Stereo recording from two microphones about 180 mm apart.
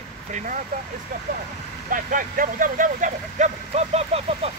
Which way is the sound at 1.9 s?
50° right (ahead or behind).